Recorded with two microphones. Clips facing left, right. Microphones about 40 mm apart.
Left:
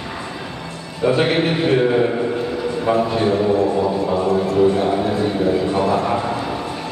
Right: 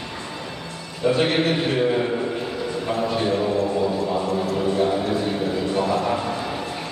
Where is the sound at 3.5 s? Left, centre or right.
Left.